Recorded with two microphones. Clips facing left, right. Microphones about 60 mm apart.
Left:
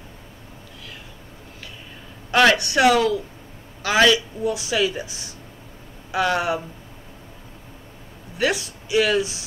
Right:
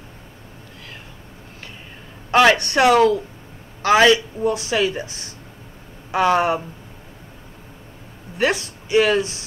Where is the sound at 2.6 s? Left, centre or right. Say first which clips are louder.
Right 3 dB; right.